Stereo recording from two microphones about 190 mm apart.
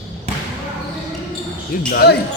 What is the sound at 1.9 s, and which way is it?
Speech, 55° left (ahead or behind).